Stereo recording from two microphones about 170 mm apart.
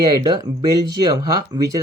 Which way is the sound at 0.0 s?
25° right (ahead or behind).